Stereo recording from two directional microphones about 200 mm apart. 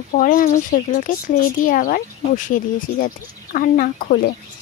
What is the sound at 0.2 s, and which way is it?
Speech, 40° left (ahead or behind).